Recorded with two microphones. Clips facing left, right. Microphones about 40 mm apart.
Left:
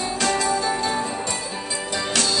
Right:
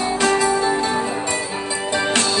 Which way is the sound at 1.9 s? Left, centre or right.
Right.